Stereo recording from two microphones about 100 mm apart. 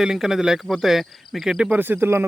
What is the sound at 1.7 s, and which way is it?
Speech, 20° right (ahead or behind).